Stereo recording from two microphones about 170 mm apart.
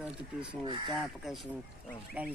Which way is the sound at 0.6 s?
30° right (ahead or behind).